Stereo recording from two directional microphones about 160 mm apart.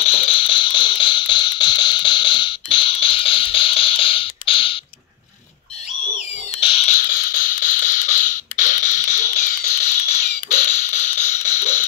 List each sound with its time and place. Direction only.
0.0 s music: 40° left (ahead or behind)
6.6 s frog: 40° left (ahead or behind)
7.0 s a sound: 60° left (ahead or behind); by 11.8 s 45° left (ahead or behind)